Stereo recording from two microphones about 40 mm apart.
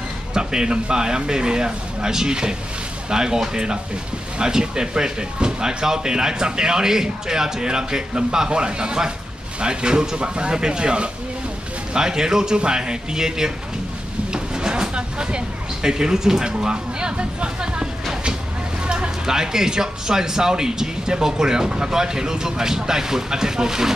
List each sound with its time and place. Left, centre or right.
0.3 s speech: centre
18.9 s speech: centre